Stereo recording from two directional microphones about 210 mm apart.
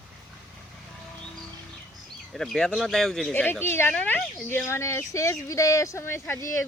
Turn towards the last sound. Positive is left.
turn(degrees=10)  # may be behind; listen again after turning